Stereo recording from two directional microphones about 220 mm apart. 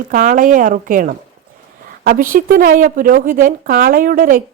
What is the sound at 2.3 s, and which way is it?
Speech, 40° right (ahead or behind).